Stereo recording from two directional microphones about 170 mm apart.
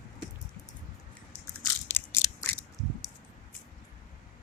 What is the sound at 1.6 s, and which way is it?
Crushing, 15° left (ahead or behind).